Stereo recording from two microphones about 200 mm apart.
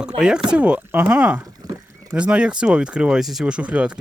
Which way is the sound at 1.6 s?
20° right (ahead or behind).